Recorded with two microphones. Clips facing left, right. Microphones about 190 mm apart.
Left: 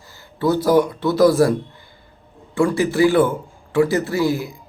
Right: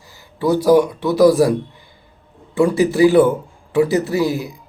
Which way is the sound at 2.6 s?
20° right (ahead or behind).